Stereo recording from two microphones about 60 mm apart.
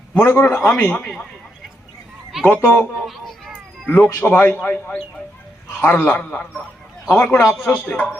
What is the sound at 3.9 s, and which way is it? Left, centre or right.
Speech, left.